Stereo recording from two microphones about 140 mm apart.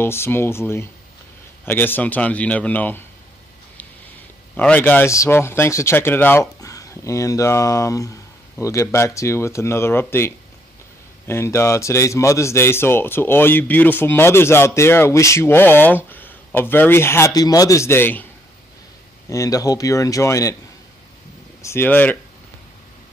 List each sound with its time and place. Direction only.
0.0 s a man's voice: 15° left (ahead or behind)
4.6 s a man's voice: 10° left (ahead or behind)
19.2 s speech: 25° left (ahead or behind)
21.6 s a man's voice: 15° left (ahead or behind)